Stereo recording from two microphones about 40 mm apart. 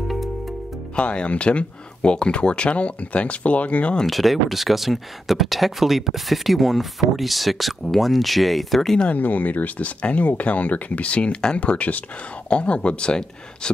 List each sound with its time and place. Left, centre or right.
0.9 s speech: left
4.0 s speech: centre
9.1 s speech: left